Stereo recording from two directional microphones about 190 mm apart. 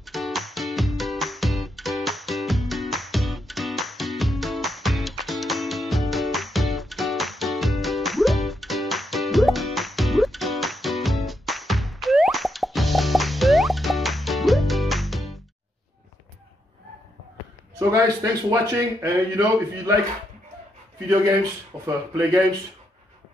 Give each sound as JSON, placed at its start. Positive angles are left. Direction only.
{"t": 0.0, "sound": "music", "side_deg": 0}
{"t": 17.7, "sound": "a man's voice", "side_deg": -15}
{"t": 21.1, "sound": "a man's voice", "side_deg": -15}